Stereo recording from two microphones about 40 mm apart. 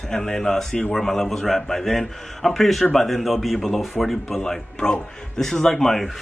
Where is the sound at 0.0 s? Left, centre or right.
Centre.